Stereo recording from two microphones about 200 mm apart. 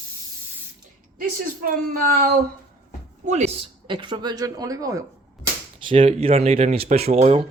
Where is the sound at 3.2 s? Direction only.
35° right (ahead or behind); by 5.0 s 15° right (ahead or behind).